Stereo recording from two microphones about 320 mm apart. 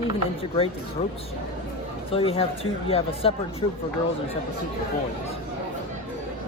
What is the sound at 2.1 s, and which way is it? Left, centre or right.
Speech, centre.